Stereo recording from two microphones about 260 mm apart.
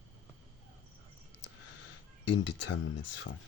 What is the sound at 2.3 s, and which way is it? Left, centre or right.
Speech, left.